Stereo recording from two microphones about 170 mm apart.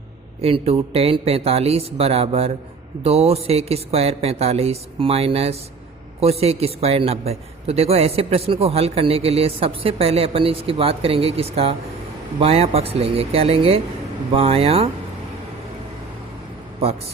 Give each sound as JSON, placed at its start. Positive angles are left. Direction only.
{"t": 0.4, "sound": "a man's voice", "side_deg": -35}